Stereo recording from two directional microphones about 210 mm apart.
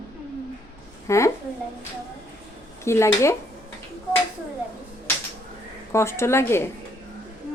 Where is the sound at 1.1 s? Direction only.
15° left (ahead or behind).